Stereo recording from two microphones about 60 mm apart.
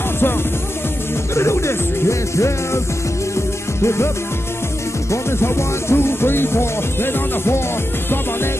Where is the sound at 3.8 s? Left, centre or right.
Left.